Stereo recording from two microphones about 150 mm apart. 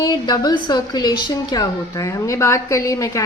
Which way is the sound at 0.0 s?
25° left (ahead or behind).